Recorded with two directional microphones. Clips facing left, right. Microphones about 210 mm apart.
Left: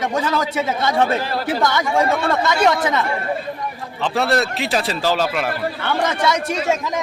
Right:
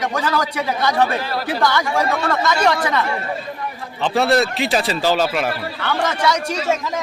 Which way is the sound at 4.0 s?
Centre (ahead or behind).